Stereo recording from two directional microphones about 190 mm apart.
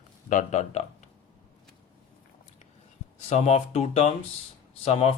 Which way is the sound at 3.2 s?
35° left (ahead or behind).